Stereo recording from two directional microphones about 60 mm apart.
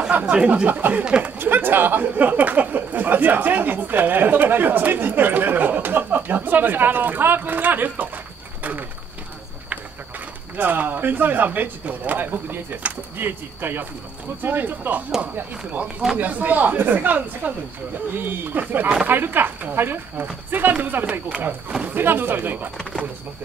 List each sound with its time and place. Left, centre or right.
0.1 s speech: right
0.7 s speech: right
1.0 s speech: centre
1.4 s speech: right
10.6 s speech: right